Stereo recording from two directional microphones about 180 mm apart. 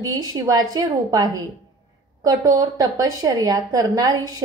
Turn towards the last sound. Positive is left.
turn(degrees=-20)  # may be behind; listen again after turning